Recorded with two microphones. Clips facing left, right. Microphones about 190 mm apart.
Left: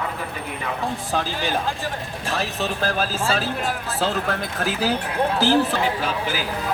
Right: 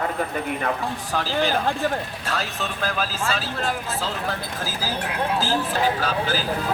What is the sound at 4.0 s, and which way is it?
Speech, 65° left (ahead or behind).